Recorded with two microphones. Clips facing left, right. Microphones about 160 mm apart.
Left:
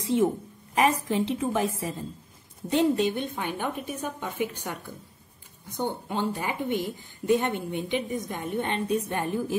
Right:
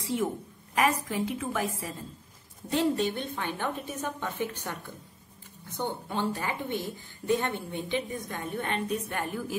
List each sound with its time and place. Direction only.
0.0 s a woman's voice: 20° left (ahead or behind)